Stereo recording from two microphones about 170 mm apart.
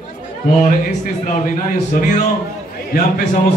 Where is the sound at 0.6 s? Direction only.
50° left (ahead or behind).